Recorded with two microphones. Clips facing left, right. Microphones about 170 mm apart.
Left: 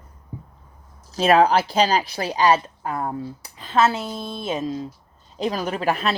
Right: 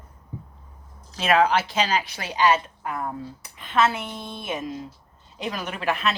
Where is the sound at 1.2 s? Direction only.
35° left (ahead or behind).